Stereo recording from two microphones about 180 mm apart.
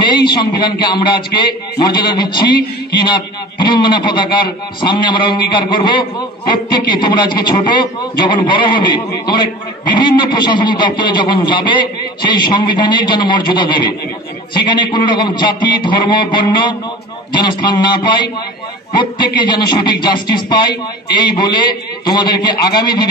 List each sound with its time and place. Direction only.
0.3 s a man's voice: 25° left (ahead or behind)